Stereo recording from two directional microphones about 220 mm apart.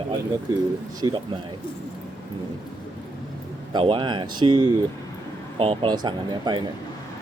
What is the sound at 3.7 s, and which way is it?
Speech, 25° right (ahead or behind).